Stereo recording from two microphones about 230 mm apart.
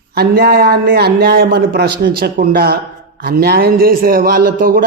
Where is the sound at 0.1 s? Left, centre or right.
Right.